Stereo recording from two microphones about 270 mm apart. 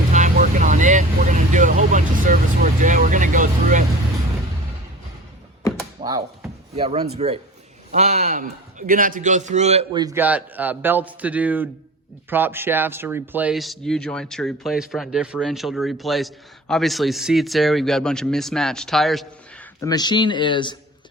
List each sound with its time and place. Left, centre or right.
0.1 s vehicle: right
6.0 s a sound: centre
6.7 s a man's voice: right; by 19.6 s centre
19.8 s speech: centre